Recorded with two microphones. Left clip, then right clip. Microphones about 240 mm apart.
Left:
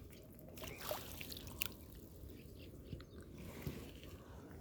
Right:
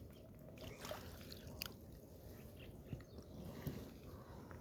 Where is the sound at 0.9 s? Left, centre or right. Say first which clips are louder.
Left 6 dB; left.